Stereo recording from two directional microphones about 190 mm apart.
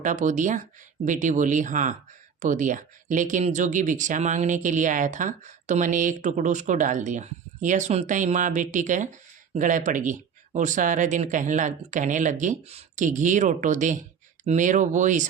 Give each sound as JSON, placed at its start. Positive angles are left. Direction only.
{"t": 0.0, "sound": "speech", "side_deg": -40}